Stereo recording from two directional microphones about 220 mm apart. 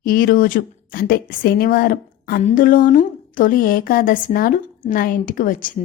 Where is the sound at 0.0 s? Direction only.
40° left (ahead or behind).